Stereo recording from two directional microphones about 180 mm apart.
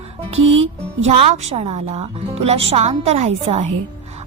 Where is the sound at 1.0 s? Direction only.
35° right (ahead or behind).